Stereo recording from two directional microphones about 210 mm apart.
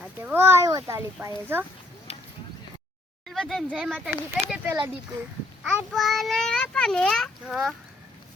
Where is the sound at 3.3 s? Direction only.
Centre (ahead or behind).